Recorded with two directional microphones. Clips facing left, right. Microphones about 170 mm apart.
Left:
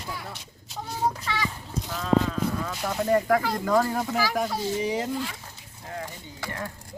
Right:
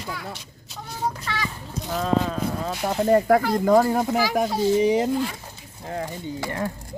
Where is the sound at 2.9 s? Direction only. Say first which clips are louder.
Right 5 dB; 30° right (ahead or behind).